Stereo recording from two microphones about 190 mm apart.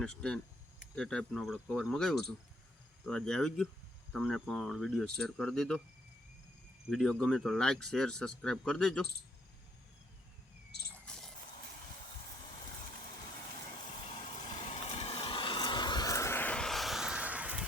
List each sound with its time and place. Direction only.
0.0 s speech: 5° left (ahead or behind)
6.9 s speech: centre (ahead or behind)
11.0 s a sound: 5° left (ahead or behind)
13.7 s vehicle: 30° left (ahead or behind)
14.3 s vehicle: 40° left (ahead or behind); by 17.7 s 5° right (ahead or behind)